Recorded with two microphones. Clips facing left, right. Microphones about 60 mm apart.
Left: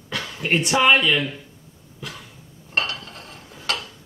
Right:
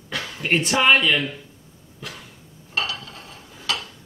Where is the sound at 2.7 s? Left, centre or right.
Left.